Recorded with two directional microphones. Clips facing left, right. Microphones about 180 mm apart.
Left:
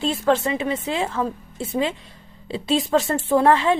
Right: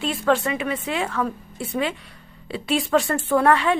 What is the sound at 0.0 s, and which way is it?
A woman's voice, 25° left (ahead or behind).